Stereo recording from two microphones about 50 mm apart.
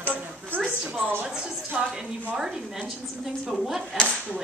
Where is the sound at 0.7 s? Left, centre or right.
Right.